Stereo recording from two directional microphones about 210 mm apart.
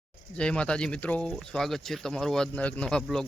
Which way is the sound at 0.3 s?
5° left (ahead or behind).